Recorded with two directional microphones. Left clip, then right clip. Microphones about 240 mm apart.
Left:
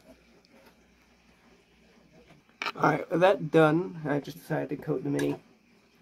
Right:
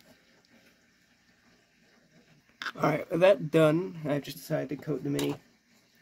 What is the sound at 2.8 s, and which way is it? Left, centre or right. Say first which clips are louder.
Speech: left 1 dB; right.